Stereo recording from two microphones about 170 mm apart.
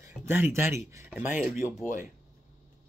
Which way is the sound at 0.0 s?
15° right (ahead or behind).